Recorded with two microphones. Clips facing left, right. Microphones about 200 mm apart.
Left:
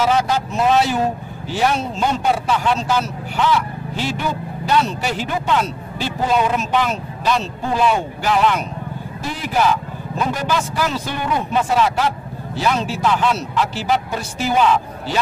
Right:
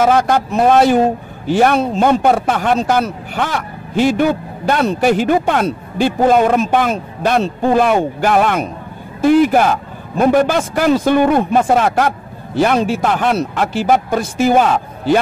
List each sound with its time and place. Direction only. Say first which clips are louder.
0.0 s speech: right 5 dB; 55° right (ahead or behind)